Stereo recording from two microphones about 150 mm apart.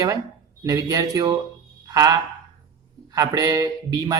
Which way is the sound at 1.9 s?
25° right (ahead or behind).